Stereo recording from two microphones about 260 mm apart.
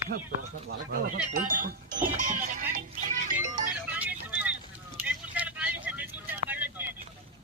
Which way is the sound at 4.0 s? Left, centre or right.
Centre.